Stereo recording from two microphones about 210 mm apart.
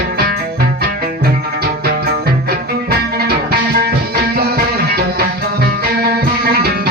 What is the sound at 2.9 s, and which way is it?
Music, 50° right (ahead or behind).